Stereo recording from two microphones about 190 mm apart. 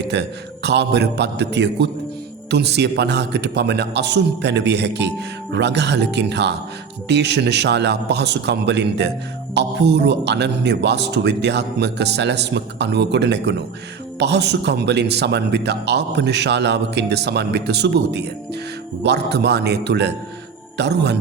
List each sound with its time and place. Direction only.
0.1 s a man's voice: 65° right (ahead or behind)